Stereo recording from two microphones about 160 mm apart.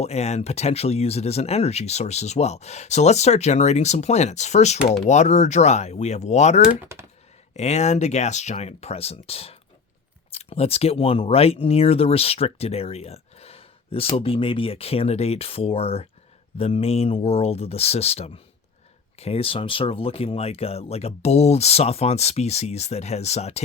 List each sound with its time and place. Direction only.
0.0 s speech: 45° left (ahead or behind)
4.8 s speech: 5° right (ahead or behind)
5.0 s speech: 45° left (ahead or behind)